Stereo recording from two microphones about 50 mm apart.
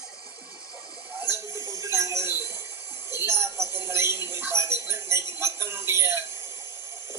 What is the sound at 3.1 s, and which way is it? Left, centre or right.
Speech, right.